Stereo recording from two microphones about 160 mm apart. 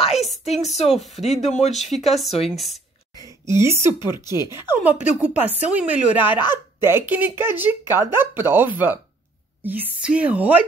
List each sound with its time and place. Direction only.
0.1 s a sound: centre (ahead or behind)
0.6 s speech: 45° left (ahead or behind)
0.8 s speech: centre (ahead or behind)
1.1 s speech: 45° left (ahead or behind)
1.9 s speech: centre (ahead or behind)
3.2 s speech: 20° right (ahead or behind)